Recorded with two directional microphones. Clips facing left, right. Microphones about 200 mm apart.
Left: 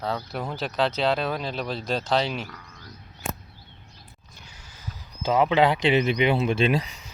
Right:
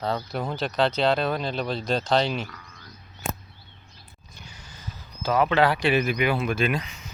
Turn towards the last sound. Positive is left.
turn(degrees=35)  # may be behind; listen again after turning